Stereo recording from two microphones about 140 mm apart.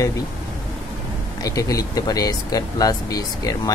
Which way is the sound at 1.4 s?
25° left (ahead or behind).